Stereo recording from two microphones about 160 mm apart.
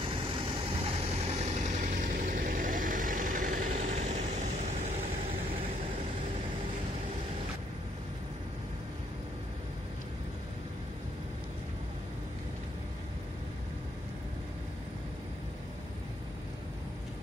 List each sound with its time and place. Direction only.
0.2 s vehicle: 40° right (ahead or behind)